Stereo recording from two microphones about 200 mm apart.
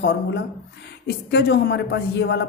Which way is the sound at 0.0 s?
60° left (ahead or behind).